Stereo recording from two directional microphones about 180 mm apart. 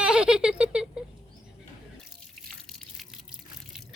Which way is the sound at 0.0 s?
5° right (ahead or behind).